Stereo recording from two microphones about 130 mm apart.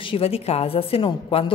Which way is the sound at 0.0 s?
45° left (ahead or behind).